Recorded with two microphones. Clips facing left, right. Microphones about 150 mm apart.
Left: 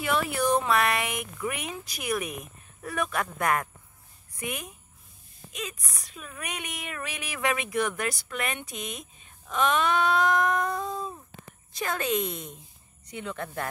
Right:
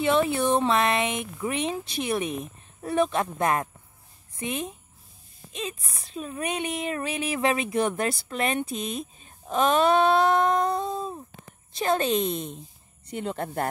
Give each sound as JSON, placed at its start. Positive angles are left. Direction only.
{"t": 0.0, "sound": "speech", "side_deg": -25}